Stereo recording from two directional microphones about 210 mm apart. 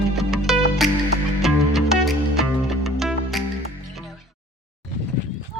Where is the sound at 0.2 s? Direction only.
Centre (ahead or behind).